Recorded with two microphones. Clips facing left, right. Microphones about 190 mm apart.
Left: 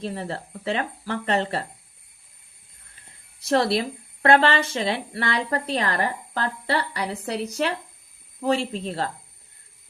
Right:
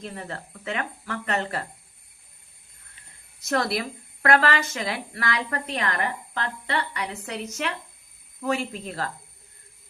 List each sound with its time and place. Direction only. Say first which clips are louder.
0.0 s speech: left 5 dB; 30° left (ahead or behind)
3.4 s speech: left 4 dB; 30° left (ahead or behind)